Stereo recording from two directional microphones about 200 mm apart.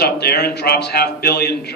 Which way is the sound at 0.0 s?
55° left (ahead or behind).